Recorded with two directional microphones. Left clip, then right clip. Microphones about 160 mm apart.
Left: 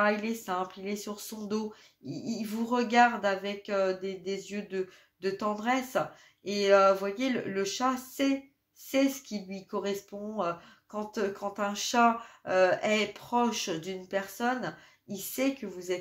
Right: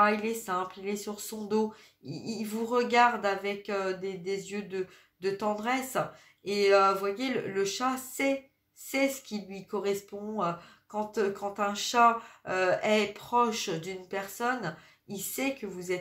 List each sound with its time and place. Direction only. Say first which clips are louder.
0.0 s speech: right 2 dB; 30° left (ahead or behind)